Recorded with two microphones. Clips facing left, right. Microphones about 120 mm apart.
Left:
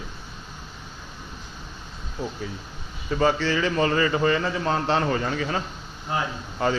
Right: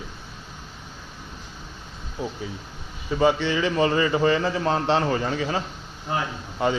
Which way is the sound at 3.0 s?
15° right (ahead or behind).